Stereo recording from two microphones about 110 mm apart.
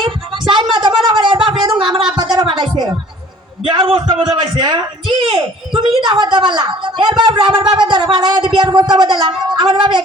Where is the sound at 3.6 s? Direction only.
50° right (ahead or behind).